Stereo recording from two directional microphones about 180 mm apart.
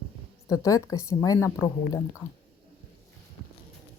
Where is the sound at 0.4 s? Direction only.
20° left (ahead or behind).